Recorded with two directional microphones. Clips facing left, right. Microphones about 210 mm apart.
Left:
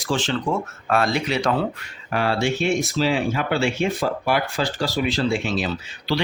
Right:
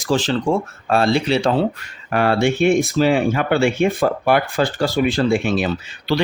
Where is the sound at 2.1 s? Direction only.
55° right (ahead or behind).